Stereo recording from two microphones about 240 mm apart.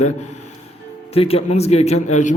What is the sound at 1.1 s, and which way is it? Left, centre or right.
A man's voice, left.